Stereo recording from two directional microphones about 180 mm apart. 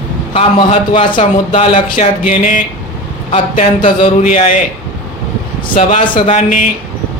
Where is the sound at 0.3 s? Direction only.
35° left (ahead or behind).